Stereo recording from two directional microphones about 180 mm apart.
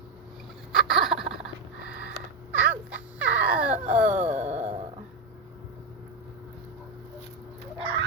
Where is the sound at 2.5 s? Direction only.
10° right (ahead or behind).